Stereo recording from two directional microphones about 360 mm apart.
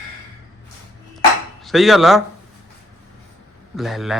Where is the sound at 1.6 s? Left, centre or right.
Centre.